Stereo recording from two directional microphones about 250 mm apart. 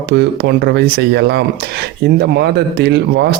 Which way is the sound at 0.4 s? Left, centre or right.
Right.